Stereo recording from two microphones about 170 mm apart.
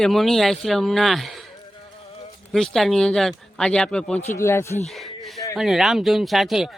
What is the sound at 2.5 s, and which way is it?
Speech, centre (ahead or behind).